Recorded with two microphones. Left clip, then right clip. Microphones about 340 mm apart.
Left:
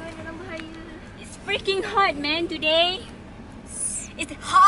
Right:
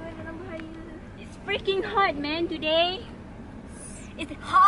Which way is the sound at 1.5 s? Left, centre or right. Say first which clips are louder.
Left 2 dB; centre.